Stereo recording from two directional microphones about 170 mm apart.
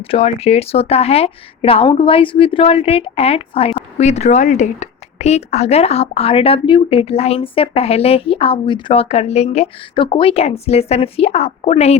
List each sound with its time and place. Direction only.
0.0 s speech: 35° left (ahead or behind)